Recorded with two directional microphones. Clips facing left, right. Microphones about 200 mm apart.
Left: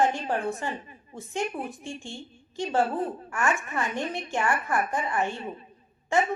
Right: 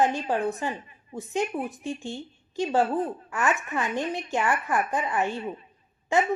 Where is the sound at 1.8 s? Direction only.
15° right (ahead or behind).